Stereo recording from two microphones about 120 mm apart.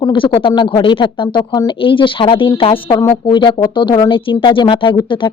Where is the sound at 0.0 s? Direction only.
45° left (ahead or behind).